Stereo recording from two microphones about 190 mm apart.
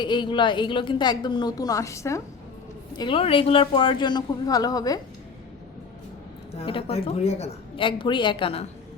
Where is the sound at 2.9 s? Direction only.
25° left (ahead or behind).